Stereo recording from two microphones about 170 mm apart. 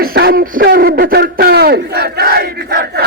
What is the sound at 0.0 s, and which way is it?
Speech, 60° right (ahead or behind).